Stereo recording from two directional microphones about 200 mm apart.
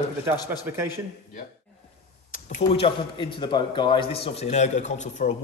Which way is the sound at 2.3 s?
40° left (ahead or behind).